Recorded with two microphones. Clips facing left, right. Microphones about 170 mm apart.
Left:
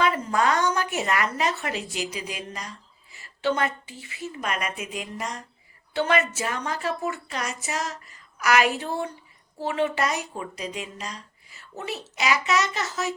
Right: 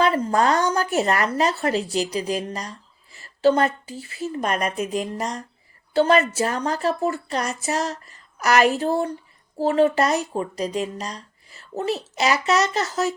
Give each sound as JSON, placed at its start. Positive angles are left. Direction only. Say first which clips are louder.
{"t": 0.0, "sound": "speech", "louder": "right 4 dB", "side_deg": -35}